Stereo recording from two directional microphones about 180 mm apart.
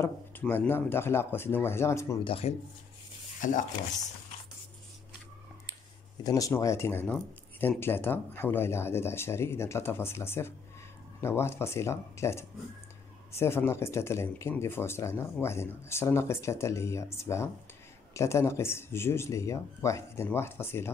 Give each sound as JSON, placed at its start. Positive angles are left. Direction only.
{"t": 0.0, "sound": "speech", "side_deg": 10}
{"t": 2.2, "sound": "speech", "side_deg": 35}
{"t": 3.3, "sound": "speech", "side_deg": 45}
{"t": 6.2, "sound": "speech", "side_deg": 20}